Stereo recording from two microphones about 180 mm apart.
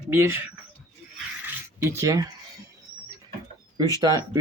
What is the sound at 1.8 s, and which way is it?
Speech, 15° right (ahead or behind).